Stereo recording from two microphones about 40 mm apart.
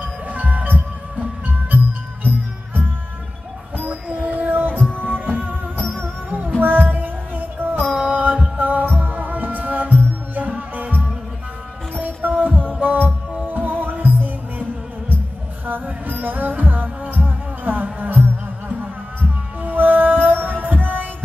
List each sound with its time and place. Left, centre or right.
0.0 s music: right
4.1 s music: right
4.7 s music: left
5.0 s music: right
6.6 s music: right
7.8 s music: right
19.6 s music: right